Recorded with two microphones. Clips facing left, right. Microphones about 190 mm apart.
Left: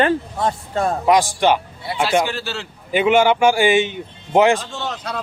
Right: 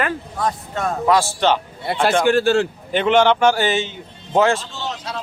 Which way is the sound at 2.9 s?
10° left (ahead or behind).